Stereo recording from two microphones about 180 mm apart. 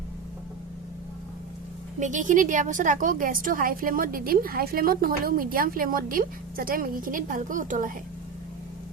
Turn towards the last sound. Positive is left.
turn(degrees=-45)  # may be behind; listen again after turning